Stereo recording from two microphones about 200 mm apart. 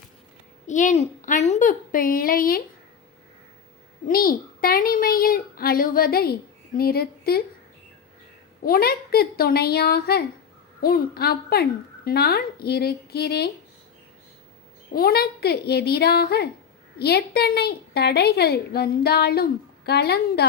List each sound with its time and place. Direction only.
0.7 s a woman's voice: 35° left (ahead or behind)
4.0 s a woman's voice: 45° left (ahead or behind)
8.6 s a woman's voice: 50° left (ahead or behind)
14.9 s a woman's voice: 50° left (ahead or behind)